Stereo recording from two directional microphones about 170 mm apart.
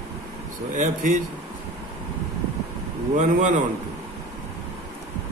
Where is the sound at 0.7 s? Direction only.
50° right (ahead or behind).